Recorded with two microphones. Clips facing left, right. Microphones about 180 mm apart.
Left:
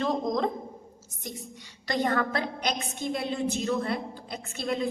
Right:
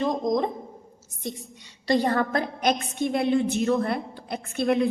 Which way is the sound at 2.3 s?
55° right (ahead or behind).